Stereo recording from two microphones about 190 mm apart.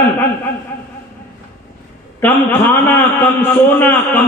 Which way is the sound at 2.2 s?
10° left (ahead or behind).